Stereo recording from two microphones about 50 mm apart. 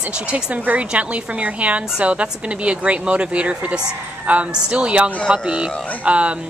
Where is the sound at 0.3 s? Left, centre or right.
Right.